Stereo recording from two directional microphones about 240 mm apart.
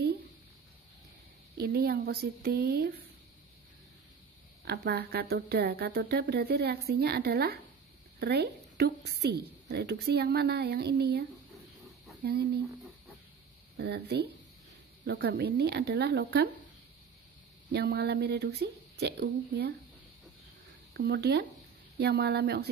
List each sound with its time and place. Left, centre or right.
1.6 s speech: right
4.6 s a woman's voice: right
13.7 s a woman's voice: right
17.7 s a woman's voice: right
20.9 s a woman's voice: right